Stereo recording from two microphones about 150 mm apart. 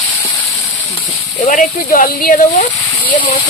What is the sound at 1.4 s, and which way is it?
Speech, 60° left (ahead or behind).